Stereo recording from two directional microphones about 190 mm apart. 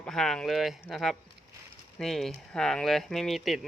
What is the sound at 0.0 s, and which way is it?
Speech, 5° left (ahead or behind).